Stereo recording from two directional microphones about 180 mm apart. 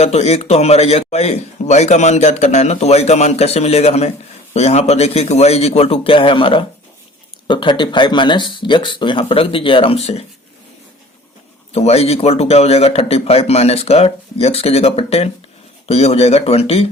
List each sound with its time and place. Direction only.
0.0 s a man's voice: 35° left (ahead or behind)
11.7 s a man's voice: 35° left (ahead or behind)